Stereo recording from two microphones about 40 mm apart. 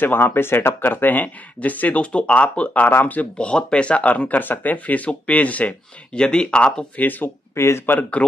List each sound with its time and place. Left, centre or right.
0.0 s speech: left
4.4 s speech: left
4.7 s speech: left
6.1 s speech: left
7.0 s speech: left
7.5 s speech: left